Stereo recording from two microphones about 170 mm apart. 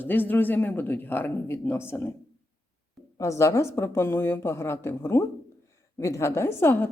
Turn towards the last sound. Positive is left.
turn(degrees=10)  # may be behind; listen again after turning